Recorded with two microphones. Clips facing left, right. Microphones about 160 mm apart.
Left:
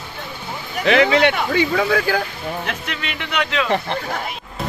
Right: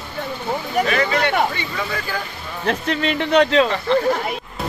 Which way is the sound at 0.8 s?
75° left (ahead or behind).